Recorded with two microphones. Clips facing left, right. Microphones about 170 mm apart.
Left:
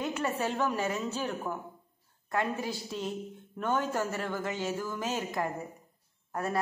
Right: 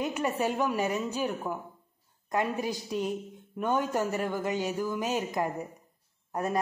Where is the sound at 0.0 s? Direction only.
15° right (ahead or behind).